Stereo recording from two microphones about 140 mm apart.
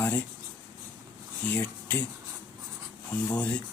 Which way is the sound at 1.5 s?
10° left (ahead or behind).